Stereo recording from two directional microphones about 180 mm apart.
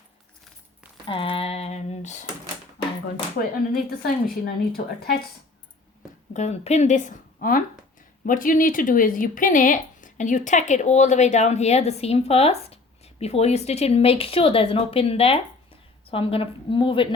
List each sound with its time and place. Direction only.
1.0 s speech: 30° left (ahead or behind)
4.0 s speech: 55° left (ahead or behind)
6.3 s a woman's voice: 40° left (ahead or behind)